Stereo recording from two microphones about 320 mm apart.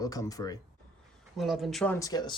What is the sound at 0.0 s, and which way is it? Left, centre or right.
Speech, centre.